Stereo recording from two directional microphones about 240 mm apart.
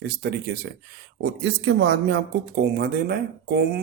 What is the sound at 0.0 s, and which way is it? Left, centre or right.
Speech, right.